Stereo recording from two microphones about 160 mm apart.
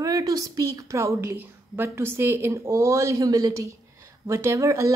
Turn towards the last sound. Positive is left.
turn(degrees=-20)  # may be behind; listen again after turning